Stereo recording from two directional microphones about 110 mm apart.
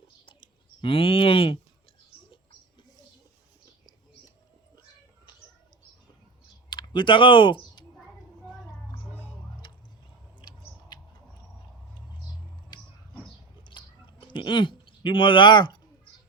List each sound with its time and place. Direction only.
0.3 s clicking: 50° left (ahead or behind)
6.7 s speech: 40° left (ahead or behind)
12.7 s a sound: 40° left (ahead or behind)